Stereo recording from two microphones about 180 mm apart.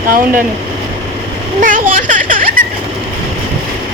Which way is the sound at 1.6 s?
50° right (ahead or behind).